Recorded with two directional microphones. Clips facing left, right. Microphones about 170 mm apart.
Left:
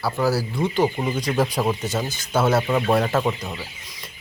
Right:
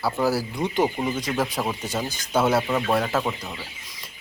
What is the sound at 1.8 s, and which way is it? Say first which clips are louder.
Speech: left 2 dB; 10° right (ahead or behind).